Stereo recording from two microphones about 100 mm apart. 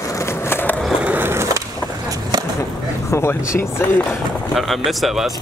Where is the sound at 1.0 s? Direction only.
20° right (ahead or behind).